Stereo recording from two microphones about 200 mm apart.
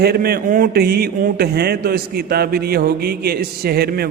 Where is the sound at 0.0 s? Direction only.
50° right (ahead or behind).